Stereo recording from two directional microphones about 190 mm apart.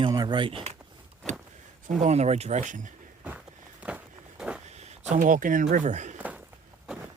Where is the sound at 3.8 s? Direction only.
5° right (ahead or behind).